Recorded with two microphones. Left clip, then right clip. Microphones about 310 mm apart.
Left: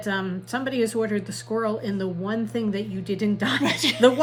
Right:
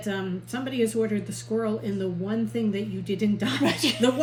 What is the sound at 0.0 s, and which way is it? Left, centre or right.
Speech, centre.